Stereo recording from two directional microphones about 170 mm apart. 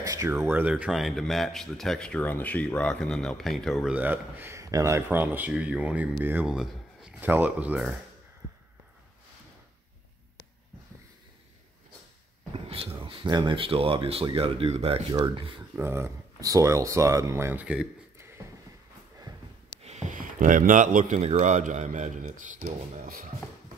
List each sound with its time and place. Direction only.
0.0 s speech: 20° right (ahead or behind)
12.5 s a sound: 35° right (ahead or behind)
13.0 s speech: 30° right (ahead or behind)
15.7 s speech: 15° right (ahead or behind)
19.8 s speech: 45° right (ahead or behind)